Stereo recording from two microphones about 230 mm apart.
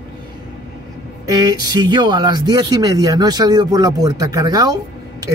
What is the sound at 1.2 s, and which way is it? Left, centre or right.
A man's voice, centre.